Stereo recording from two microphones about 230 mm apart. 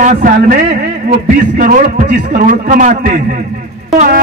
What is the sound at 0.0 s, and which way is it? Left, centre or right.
Speech, right.